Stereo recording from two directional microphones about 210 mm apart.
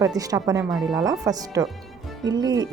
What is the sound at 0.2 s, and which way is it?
Speech, 15° right (ahead or behind).